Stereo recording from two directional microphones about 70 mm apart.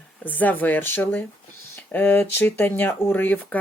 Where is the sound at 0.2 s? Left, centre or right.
Left.